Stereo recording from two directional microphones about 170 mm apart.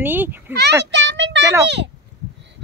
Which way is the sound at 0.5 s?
80° right.